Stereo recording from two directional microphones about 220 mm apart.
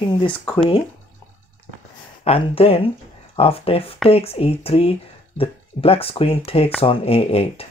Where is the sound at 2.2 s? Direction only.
25° left (ahead or behind).